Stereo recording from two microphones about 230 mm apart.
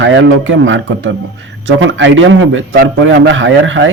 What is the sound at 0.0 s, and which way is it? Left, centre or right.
A man's voice, right.